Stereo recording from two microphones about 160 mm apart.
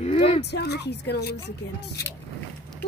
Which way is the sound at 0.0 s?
40° left (ahead or behind).